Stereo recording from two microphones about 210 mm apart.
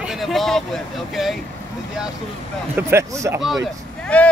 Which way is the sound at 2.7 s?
15° right (ahead or behind).